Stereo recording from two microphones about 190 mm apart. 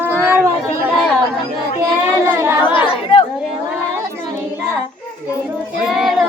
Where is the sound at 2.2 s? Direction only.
15° right (ahead or behind).